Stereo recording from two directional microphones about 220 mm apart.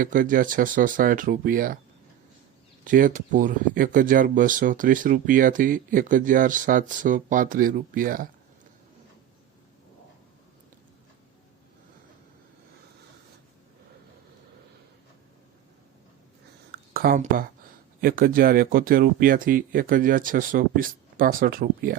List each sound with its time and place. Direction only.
0.0 s speech: 40° right (ahead or behind)
2.8 s speech: 40° right (ahead or behind)
16.9 s speech: 40° right (ahead or behind)